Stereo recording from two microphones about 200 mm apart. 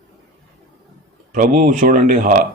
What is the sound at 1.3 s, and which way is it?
Speech, 40° right (ahead or behind).